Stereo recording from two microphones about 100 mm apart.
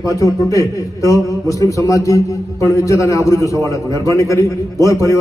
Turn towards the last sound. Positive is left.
turn(degrees=35)  # may be behind; listen again after turning